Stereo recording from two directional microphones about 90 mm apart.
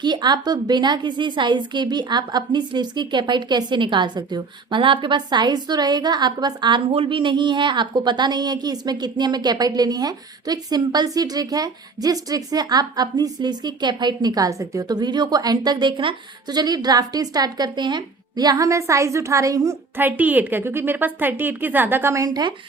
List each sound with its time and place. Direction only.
0.0 s a woman's voice: 55° right (ahead or behind)
16.5 s a woman's voice: 50° right (ahead or behind)
20.0 s a woman's voice: 20° right (ahead or behind)
22.1 s a woman's voice: 40° right (ahead or behind)